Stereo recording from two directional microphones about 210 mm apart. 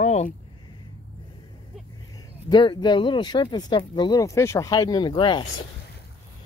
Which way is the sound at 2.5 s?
20° left (ahead or behind).